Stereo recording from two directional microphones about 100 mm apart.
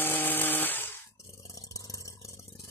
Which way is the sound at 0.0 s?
20° left (ahead or behind).